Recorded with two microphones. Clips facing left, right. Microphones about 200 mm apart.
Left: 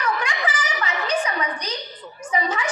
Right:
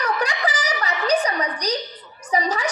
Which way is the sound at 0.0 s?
40° right (ahead or behind).